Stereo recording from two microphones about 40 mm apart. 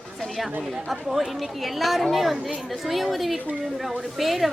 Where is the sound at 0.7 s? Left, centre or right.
Centre.